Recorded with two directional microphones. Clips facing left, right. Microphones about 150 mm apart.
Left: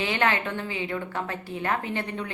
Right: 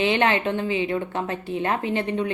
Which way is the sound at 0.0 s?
20° right (ahead or behind).